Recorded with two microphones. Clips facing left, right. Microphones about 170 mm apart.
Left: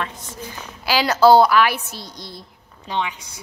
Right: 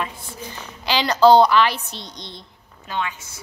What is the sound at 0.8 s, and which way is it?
A woman's voice, 5° left (ahead or behind).